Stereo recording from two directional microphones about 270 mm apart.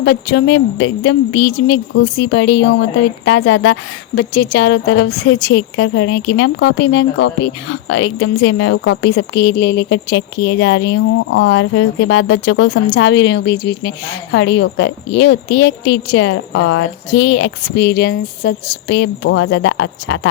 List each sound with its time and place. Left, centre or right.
0.0 s a woman's voice: left